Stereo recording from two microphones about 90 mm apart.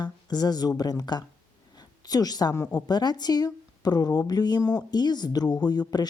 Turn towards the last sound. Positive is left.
turn(degrees=50)  # may be behind; listen again after turning